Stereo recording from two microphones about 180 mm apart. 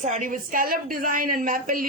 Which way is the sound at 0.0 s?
45° right (ahead or behind).